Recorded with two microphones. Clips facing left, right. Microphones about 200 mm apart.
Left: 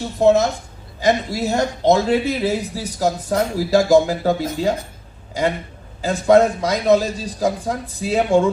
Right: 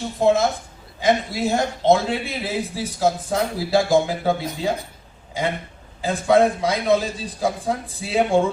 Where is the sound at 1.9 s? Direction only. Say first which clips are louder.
Left 3 dB; 40° left (ahead or behind).